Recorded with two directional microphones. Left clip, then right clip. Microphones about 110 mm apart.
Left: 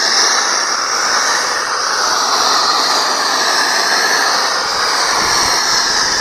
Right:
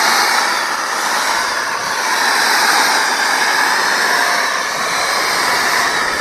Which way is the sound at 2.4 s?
40° right (ahead or behind).